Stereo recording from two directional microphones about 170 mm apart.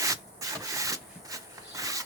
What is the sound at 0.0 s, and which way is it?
Rub, 20° right (ahead or behind).